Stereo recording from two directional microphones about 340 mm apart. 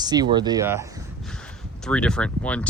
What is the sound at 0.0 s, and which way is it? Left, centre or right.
Speech, centre.